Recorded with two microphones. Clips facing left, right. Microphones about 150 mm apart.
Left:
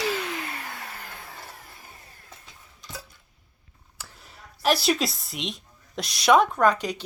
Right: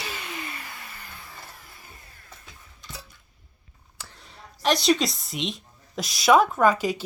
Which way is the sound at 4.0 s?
5° left (ahead or behind).